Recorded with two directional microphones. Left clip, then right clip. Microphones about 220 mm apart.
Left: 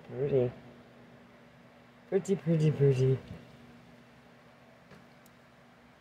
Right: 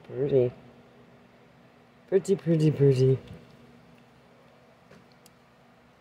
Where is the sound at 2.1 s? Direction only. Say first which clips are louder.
Right 6 dB; 20° right (ahead or behind).